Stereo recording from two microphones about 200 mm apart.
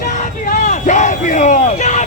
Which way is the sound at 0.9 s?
40° left (ahead or behind).